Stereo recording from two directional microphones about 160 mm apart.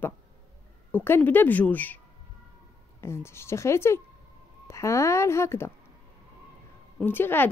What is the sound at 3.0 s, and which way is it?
Speech, 15° left (ahead or behind).